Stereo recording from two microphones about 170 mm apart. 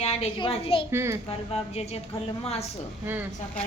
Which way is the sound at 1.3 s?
35° left (ahead or behind).